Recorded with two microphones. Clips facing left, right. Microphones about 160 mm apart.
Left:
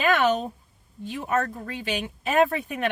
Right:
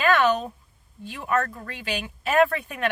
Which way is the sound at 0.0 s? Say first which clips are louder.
Right 1 dB; 20° left (ahead or behind).